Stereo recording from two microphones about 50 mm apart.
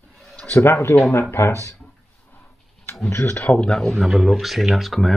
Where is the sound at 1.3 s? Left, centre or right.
Left.